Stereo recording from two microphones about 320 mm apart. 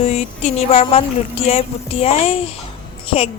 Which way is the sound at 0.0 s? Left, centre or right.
Centre.